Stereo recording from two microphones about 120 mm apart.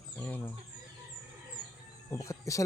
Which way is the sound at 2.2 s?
25° left (ahead or behind).